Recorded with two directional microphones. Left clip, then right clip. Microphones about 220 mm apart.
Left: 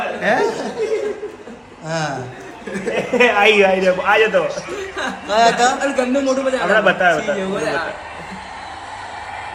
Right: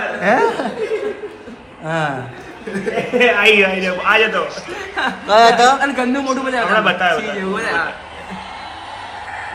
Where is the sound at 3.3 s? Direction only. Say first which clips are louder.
Even; 45° left (ahead or behind).